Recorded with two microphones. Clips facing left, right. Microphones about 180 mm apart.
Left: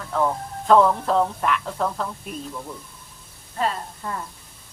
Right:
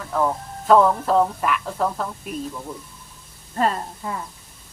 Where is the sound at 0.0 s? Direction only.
5° right (ahead or behind).